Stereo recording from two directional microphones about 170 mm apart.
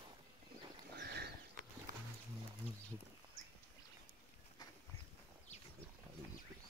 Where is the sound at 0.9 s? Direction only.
75° right (ahead or behind).